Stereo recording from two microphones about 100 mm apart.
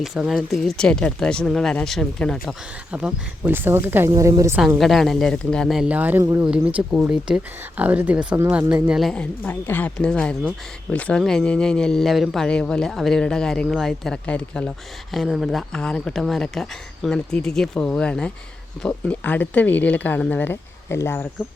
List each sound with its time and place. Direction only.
0.0 s speech: 5° right (ahead or behind)
2.9 s speech: 15° right (ahead or behind)
4.1 s a woman's voice: 35° right (ahead or behind)
4.8 s speech: centre (ahead or behind)
5.9 s speech: 15° right (ahead or behind)
9.1 s speech: 15° left (ahead or behind)
15.1 s speech: centre (ahead or behind); by 21.2 s 25° left (ahead or behind)